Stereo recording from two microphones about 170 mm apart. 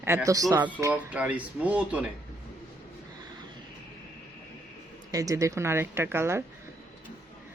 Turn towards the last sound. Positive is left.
turn(degrees=-15)  # may be behind; listen again after turning